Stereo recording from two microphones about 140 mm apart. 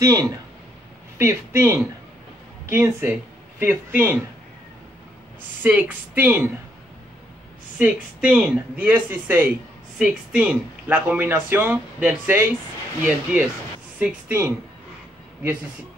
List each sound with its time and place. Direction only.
0.0 s speech: 25° right (ahead or behind)
5.6 s speech: 10° right (ahead or behind)
7.8 s speech: 5° right (ahead or behind)